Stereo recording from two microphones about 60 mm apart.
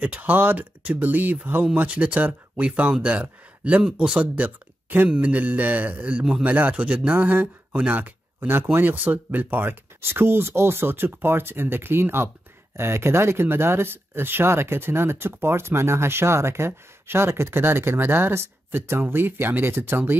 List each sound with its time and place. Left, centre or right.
0.0 s speech: right
4.4 s speech: right